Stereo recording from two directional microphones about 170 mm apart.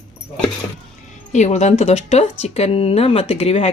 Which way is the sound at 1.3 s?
40° left (ahead or behind).